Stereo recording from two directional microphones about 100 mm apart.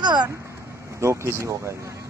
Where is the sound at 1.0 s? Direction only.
30° right (ahead or behind).